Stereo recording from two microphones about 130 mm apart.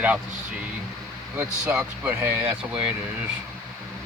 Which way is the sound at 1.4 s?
10° right (ahead or behind).